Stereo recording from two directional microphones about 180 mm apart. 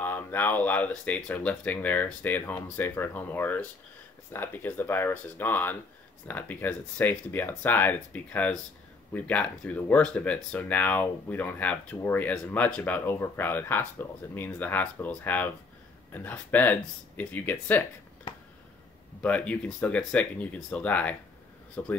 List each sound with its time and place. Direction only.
0.0 s speech: 10° left (ahead or behind)
18.3 s a sound: 30° left (ahead or behind)
19.2 s speech: 10° left (ahead or behind)